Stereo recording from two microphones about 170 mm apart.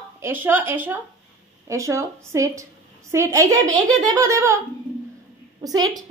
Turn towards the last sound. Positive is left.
turn(degrees=-20)  # may be behind; listen again after turning